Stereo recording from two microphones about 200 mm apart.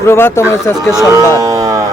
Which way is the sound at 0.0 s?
10° left (ahead or behind).